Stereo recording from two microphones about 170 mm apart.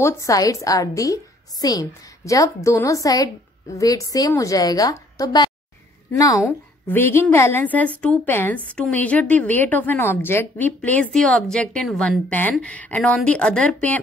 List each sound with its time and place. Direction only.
0.0 s a woman's voice: 20° left (ahead or behind)
6.9 s a woman's voice: 15° left (ahead or behind)